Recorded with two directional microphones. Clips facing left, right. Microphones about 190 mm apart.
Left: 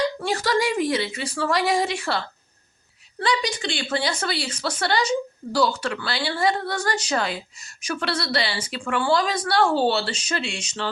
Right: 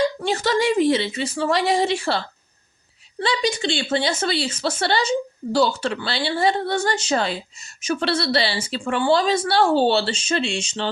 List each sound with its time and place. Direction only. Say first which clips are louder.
0.2 s a woman's voice: right 2 dB; 25° right (ahead or behind)